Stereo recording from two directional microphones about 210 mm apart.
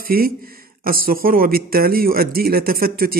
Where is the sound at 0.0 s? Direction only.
45° right (ahead or behind).